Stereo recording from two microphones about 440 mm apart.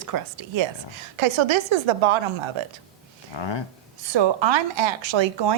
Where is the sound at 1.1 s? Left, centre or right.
Right.